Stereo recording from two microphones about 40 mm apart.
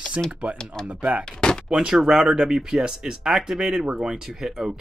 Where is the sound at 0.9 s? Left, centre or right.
Right.